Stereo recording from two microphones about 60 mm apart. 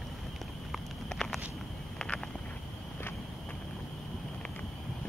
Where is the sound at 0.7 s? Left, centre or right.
Centre.